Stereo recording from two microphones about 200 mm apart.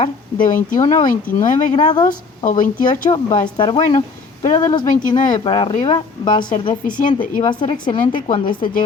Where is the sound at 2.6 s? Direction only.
40° left (ahead or behind).